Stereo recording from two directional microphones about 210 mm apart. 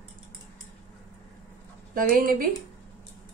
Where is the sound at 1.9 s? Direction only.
40° right (ahead or behind).